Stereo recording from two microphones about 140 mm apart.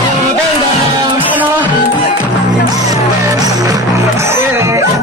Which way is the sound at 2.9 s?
25° right (ahead or behind).